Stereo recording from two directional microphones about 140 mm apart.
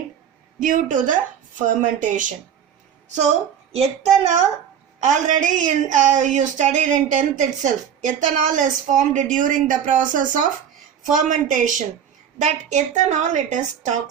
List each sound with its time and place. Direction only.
0.6 s a woman's voice: 65° right (ahead or behind)
3.7 s speech: 45° right (ahead or behind)
5.0 s a woman's voice: 60° right (ahead or behind)